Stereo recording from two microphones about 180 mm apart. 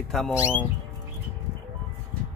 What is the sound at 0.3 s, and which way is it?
Speech, 15° left (ahead or behind).